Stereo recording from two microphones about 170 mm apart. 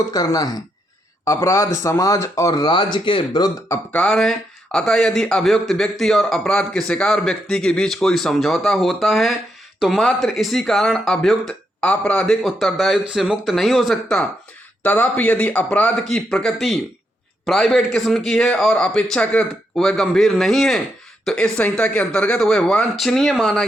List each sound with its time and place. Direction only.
0.1 s speech: 20° left (ahead or behind)
3.9 s a man's voice: 5° left (ahead or behind)